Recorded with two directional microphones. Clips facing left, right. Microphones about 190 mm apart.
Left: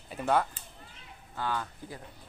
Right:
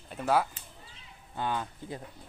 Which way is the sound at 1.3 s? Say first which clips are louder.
Right 1 dB; 20° right (ahead or behind).